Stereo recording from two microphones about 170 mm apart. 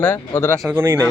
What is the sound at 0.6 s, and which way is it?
Speech, 10° right (ahead or behind).